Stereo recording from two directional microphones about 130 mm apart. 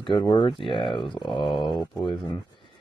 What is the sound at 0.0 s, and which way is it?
Speech, 35° left (ahead or behind).